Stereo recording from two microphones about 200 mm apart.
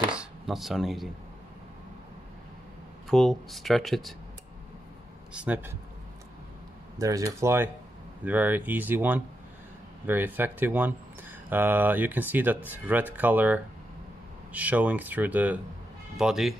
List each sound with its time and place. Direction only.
0.1 s a sound: 5° right (ahead or behind)
3.1 s speech: centre (ahead or behind)
5.3 s speech: 5° right (ahead or behind)
7.0 s speech: 15° right (ahead or behind); by 16.5 s centre (ahead or behind)